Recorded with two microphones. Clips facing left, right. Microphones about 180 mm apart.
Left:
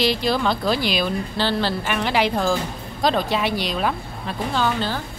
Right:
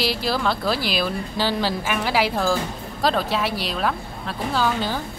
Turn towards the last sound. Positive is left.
turn(degrees=-10)  # may be behind; listen again after turning